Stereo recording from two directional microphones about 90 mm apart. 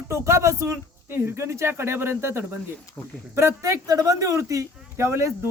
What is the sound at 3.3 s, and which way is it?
Speech, 30° right (ahead or behind).